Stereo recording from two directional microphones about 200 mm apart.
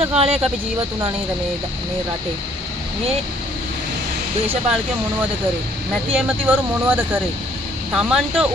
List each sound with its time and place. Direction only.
0.0 s speech: 30° right (ahead or behind)
6.1 s speech: 10° right (ahead or behind)